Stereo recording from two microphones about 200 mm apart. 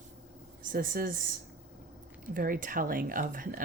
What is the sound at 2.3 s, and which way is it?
Speech, 45° right (ahead or behind).